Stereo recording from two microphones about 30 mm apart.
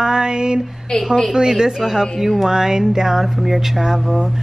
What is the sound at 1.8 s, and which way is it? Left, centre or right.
Speech, centre.